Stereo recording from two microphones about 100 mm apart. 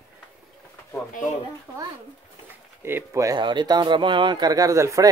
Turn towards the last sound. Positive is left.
turn(degrees=-30)  # may be behind; listen again after turning